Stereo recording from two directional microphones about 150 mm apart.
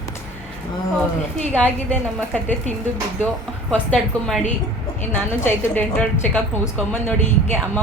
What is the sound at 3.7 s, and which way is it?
A woman's voice, 5° left (ahead or behind).